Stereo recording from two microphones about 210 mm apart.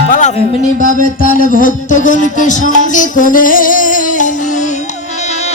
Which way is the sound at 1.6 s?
35° left (ahead or behind).